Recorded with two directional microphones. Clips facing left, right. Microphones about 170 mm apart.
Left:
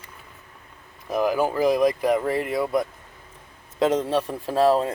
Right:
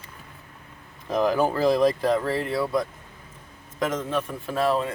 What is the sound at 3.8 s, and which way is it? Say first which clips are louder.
A man's voice: left 5 dB; 30° left (ahead or behind).